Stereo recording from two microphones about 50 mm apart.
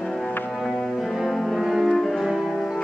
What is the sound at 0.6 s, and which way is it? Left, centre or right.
Music, centre.